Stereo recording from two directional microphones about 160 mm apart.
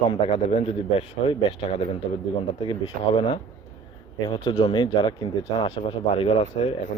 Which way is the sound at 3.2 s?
30° left (ahead or behind).